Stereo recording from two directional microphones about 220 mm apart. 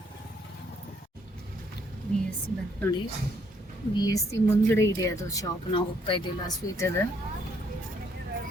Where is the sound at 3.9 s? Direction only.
15° left (ahead or behind).